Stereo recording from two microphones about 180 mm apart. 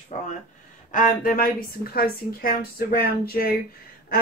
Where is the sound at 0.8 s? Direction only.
45° left (ahead or behind).